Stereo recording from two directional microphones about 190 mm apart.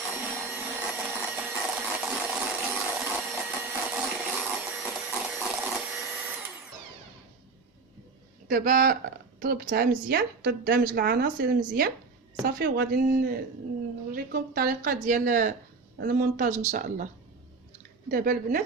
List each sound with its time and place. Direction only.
0.2 s vacuum cleaner: 10° right (ahead or behind)
8.4 s a woman's voice: 50° right (ahead or behind)
18.1 s a woman's voice: 45° right (ahead or behind)